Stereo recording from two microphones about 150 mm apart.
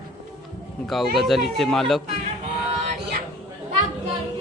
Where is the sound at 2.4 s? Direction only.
50° right (ahead or behind).